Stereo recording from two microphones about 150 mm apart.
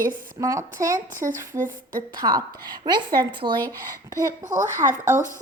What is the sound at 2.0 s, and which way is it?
A woman's voice, 25° right (ahead or behind).